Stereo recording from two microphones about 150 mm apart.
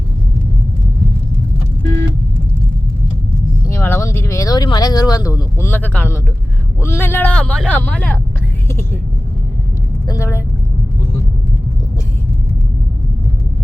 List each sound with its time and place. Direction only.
3.7 s speech: 15° left (ahead or behind)
10.1 s vehicle: 20° left (ahead or behind)